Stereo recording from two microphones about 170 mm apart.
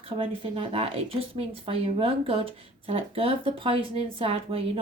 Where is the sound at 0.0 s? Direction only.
35° right (ahead or behind).